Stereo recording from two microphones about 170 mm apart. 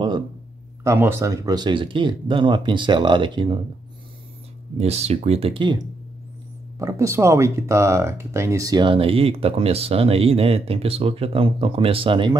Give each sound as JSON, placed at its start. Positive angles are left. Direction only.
{"t": 0.8, "sound": "speech", "side_deg": -15}
{"t": 4.7, "sound": "speech", "side_deg": -40}
{"t": 6.8, "sound": "speech", "side_deg": -20}